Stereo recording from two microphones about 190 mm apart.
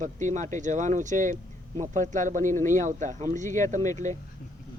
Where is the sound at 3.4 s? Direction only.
15° left (ahead or behind).